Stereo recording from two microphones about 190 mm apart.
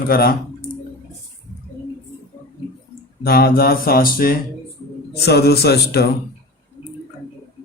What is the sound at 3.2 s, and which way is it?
A man's voice, 55° left (ahead or behind).